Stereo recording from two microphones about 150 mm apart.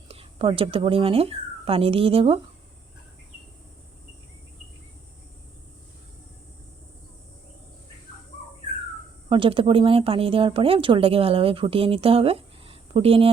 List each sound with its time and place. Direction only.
0.1 s speech: 35° right (ahead or behind)
9.3 s speech: 35° right (ahead or behind)